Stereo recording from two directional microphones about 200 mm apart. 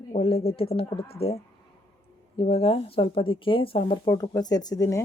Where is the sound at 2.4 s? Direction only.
30° left (ahead or behind).